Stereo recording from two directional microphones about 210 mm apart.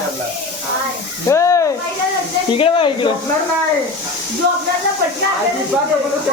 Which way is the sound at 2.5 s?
25° left (ahead or behind).